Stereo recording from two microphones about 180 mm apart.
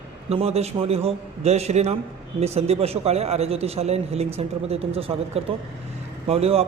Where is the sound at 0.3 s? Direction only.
35° right (ahead or behind).